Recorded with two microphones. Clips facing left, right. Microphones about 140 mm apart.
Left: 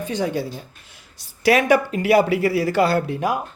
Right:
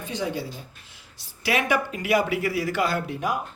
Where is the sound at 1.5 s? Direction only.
40° left (ahead or behind).